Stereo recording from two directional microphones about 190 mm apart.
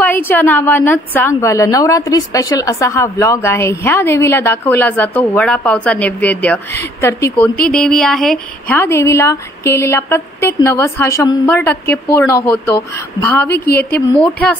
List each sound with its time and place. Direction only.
0.0 s a woman's voice: 10° left (ahead or behind)
13.5 s a woman's voice: 55° left (ahead or behind)